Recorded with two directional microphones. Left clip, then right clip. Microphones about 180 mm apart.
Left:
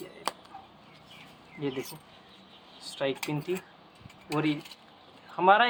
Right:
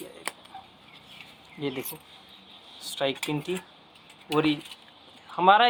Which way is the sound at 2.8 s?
35° right (ahead or behind).